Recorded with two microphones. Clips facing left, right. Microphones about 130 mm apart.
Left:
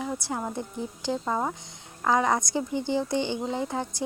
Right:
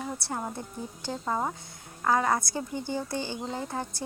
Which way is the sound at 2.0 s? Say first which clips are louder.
Left 2 dB; 15° left (ahead or behind).